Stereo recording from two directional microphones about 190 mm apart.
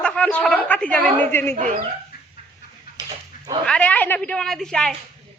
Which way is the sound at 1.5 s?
40° right (ahead or behind).